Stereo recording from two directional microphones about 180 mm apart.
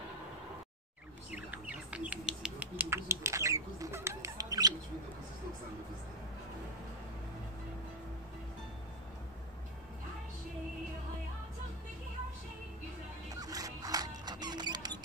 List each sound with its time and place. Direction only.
1.3 s bird: 5° right (ahead or behind)
13.3 s music: 20° right (ahead or behind)